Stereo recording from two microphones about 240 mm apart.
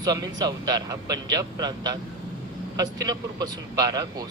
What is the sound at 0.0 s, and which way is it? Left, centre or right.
A man's voice, centre.